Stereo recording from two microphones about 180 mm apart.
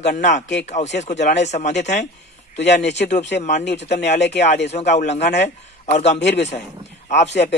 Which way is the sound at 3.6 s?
70° left (ahead or behind).